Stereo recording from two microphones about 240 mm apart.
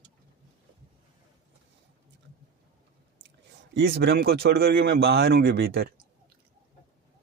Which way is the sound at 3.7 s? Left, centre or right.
Right.